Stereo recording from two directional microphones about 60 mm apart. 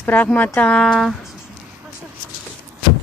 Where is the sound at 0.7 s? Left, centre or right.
Centre.